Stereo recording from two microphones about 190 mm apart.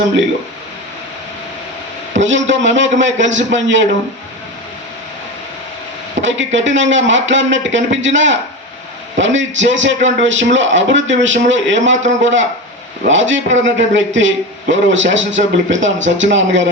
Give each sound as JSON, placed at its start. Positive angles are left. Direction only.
{"t": 2.2, "sound": "a man's voice", "side_deg": -75}
{"t": 6.2, "sound": "a man's voice", "side_deg": -80}